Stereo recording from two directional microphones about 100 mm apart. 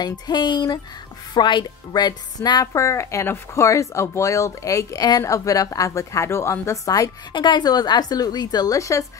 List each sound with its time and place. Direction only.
0.0 s a woman's voice: 45° left (ahead or behind)
2.6 s speech: 30° left (ahead or behind)
7.3 s a woman's voice: 50° left (ahead or behind); by 9.0 s 35° left (ahead or behind)